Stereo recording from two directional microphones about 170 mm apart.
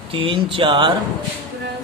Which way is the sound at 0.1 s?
30° right (ahead or behind).